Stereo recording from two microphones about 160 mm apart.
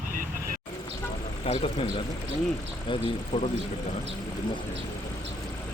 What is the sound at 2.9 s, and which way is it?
Speech, 40° left (ahead or behind).